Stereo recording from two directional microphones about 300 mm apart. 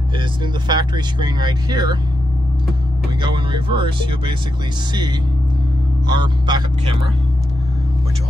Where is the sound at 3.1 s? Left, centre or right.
Centre.